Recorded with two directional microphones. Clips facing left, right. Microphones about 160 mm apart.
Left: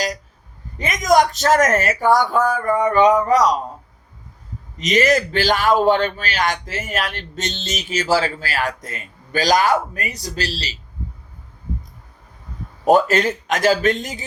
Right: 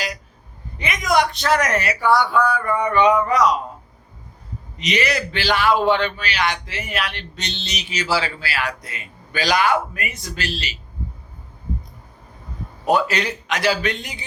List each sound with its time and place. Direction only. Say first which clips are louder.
0.8 s a man's voice: left 4 dB; 40° left (ahead or behind)
4.8 s a man's voice: left 6 dB; 45° left (ahead or behind)
12.8 s a man's voice: left 5 dB; 45° left (ahead or behind)